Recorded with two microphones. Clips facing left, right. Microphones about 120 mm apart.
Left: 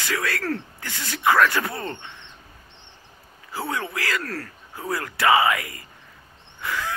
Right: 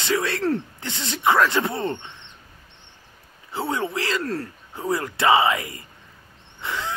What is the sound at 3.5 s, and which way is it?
Speech, 25° right (ahead or behind).